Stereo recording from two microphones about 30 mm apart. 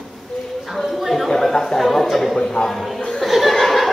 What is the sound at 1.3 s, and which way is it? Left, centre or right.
Chatter, centre.